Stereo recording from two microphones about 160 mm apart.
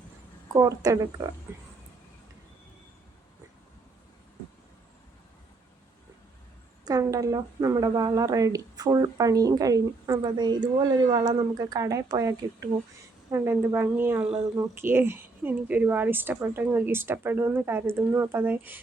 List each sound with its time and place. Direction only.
0.4 s speech: 20° right (ahead or behind)
6.8 s a woman's voice: 20° right (ahead or behind)